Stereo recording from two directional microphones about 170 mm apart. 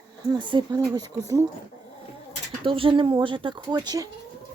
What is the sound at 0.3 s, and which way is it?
Speech, 25° right (ahead or behind).